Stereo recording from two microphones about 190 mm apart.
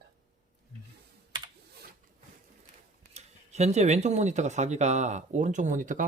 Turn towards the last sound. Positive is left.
turn(degrees=-45)  # may be behind; listen again after turning